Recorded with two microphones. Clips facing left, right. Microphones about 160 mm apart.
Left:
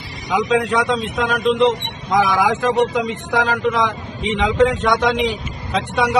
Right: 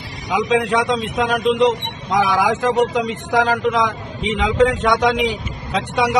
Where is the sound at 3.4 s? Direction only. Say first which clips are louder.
Right 1 dB; 10° right (ahead or behind).